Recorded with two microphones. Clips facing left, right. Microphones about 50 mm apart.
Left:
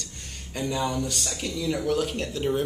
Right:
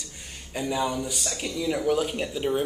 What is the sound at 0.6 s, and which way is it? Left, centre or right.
A man's voice, centre.